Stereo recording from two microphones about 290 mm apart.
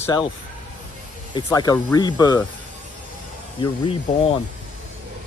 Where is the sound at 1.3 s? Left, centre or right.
Centre.